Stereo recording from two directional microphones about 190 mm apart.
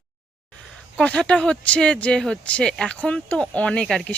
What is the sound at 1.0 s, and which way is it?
Speech, 5° left (ahead or behind).